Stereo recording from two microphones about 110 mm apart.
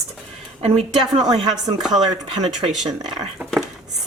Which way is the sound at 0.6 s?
60° right (ahead or behind).